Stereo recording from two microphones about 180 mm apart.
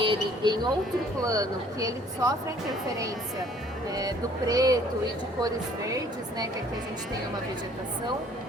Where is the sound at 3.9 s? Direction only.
20° right (ahead or behind).